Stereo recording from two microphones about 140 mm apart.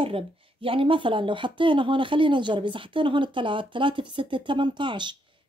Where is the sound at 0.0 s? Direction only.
40° right (ahead or behind).